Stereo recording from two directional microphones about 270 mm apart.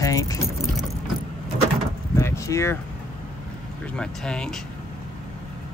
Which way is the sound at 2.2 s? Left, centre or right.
Centre.